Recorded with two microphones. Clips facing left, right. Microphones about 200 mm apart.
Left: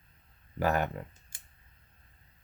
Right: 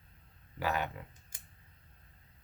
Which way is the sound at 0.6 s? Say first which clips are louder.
Left 6 dB; 50° left (ahead or behind).